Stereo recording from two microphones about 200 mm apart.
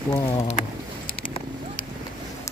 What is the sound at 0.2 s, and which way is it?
Speech, 25° left (ahead or behind).